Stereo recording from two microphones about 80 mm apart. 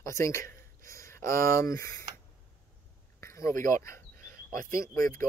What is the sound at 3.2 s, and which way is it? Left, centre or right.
Speech, left.